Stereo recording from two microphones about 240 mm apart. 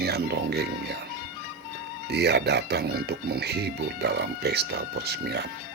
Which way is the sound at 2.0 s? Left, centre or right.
Right.